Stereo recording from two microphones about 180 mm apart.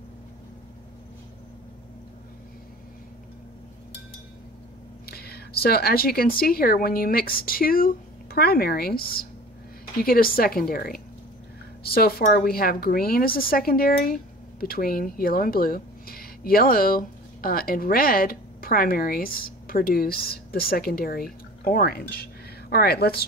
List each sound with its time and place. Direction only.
5.0 s a woman's voice: 60° left (ahead or behind)